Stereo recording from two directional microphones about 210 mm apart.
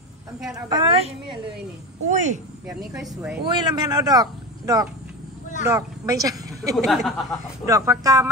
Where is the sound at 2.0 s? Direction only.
35° right (ahead or behind).